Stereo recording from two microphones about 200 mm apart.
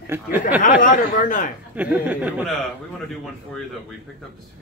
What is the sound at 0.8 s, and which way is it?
Speech, 40° left (ahead or behind).